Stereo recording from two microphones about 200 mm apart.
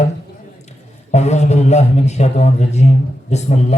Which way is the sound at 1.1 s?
35° left (ahead or behind).